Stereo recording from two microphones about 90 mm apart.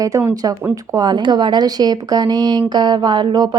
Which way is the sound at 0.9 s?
55° right (ahead or behind).